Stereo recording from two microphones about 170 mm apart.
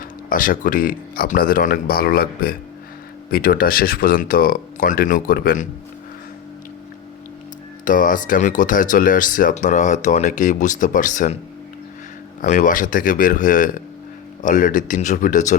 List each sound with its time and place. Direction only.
0.0 s speech: 55° left (ahead or behind)
7.9 s speech: 50° left (ahead or behind)
12.4 s speech: 50° left (ahead or behind)